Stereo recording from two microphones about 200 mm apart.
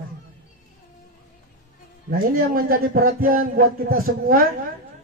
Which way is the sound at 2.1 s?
45° right (ahead or behind).